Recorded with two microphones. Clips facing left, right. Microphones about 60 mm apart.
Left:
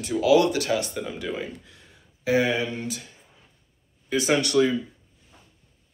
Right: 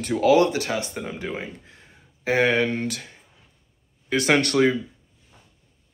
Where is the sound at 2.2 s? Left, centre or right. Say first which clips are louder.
Right 2 dB; right.